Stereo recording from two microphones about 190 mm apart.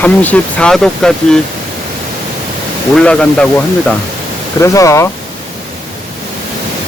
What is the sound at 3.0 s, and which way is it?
Speech, 5° left (ahead or behind).